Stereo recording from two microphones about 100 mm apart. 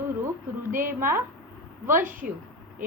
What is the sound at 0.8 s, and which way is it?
A woman's voice, 25° right (ahead or behind).